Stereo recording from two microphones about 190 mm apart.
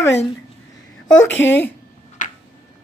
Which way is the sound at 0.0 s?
15° left (ahead or behind).